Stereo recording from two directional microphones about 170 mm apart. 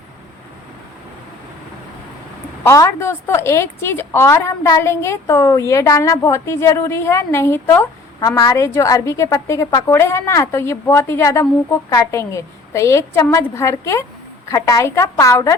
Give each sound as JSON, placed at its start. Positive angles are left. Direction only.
{"t": 2.6, "sound": "a woman's voice", "side_deg": 15}